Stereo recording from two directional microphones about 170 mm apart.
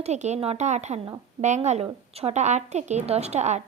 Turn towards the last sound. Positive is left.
turn(degrees=-40)  # may be behind; listen again after turning